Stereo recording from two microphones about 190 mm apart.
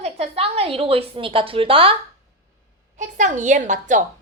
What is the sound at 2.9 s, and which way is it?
A woman's voice, 40° right (ahead or behind).